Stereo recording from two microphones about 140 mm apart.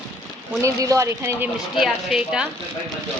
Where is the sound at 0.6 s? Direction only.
25° right (ahead or behind).